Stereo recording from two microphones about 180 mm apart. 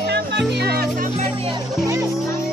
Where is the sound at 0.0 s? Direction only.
65° right (ahead or behind).